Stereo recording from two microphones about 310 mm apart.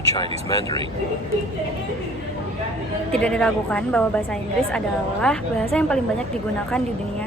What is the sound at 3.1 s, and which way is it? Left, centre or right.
A woman's voice, centre.